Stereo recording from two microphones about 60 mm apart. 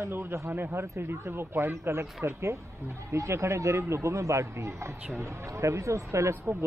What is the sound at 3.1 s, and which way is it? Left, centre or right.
Speech, right.